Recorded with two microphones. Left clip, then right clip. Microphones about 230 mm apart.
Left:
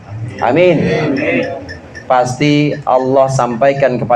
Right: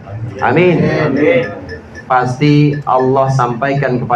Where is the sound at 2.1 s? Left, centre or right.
Left.